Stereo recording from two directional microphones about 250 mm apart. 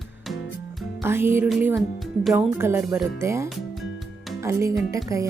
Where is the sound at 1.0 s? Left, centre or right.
Centre.